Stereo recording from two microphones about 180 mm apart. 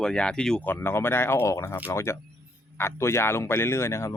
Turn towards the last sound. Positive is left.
turn(degrees=15)  # may be behind; listen again after turning